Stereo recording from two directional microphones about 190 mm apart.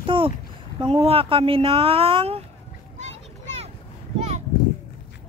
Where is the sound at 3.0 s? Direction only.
35° right (ahead or behind).